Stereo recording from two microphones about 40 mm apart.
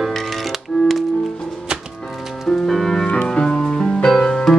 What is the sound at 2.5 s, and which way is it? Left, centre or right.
Music, centre.